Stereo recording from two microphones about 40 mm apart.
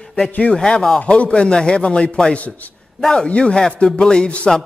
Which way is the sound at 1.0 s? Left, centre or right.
Left.